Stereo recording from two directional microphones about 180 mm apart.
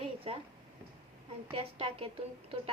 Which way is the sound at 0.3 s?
35° right (ahead or behind).